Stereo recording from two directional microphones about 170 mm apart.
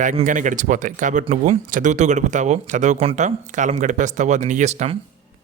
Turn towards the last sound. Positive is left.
turn(degrees=-40)  # may be behind; listen again after turning